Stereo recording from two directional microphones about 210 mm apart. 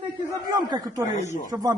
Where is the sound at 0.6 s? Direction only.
20° right (ahead or behind).